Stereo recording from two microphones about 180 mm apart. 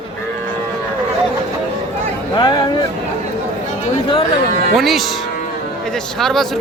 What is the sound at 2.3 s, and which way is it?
Speech, 25° left (ahead or behind).